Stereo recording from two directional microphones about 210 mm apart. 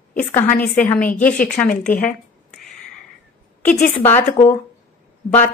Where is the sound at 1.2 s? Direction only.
40° left (ahead or behind).